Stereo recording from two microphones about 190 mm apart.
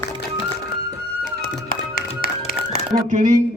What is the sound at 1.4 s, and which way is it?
Music, 50° left (ahead or behind).